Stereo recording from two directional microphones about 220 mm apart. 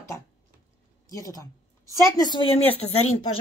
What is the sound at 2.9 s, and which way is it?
Speech, 75° left (ahead or behind).